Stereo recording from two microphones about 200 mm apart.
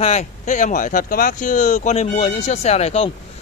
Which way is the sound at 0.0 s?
35° left (ahead or behind).